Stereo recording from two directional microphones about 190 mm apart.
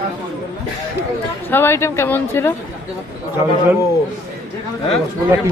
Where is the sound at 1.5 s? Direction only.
10° left (ahead or behind).